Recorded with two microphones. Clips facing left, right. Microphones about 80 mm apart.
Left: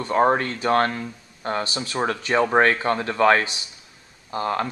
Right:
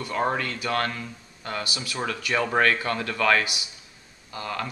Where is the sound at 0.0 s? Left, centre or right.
Left.